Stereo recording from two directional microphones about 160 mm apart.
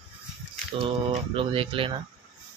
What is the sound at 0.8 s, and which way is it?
Speech, 35° right (ahead or behind).